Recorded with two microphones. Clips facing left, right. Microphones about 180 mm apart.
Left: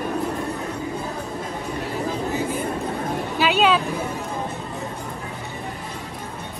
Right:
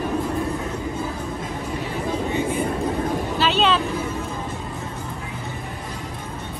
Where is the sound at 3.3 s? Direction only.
10° left (ahead or behind).